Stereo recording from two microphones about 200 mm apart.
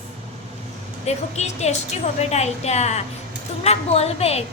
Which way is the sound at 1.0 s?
35° left (ahead or behind).